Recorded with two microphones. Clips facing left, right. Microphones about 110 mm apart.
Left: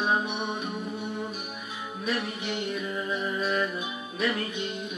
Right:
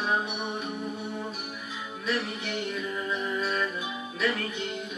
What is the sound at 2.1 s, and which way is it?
Music, 20° left (ahead or behind).